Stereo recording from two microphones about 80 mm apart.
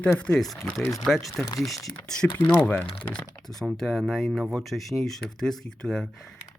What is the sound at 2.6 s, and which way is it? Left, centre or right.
Speech, left.